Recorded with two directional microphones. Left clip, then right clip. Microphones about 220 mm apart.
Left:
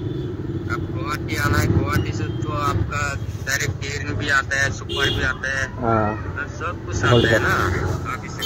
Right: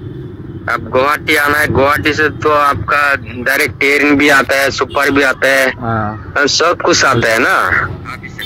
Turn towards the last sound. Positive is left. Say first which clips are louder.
# right 9 dB
turn(degrees=-45)  # may be behind; listen again after turning